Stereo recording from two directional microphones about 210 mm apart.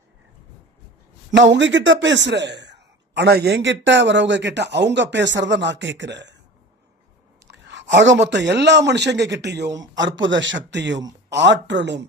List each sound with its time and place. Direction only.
1.3 s a man's voice: 60° right (ahead or behind)
7.4 s a man's voice: 60° right (ahead or behind)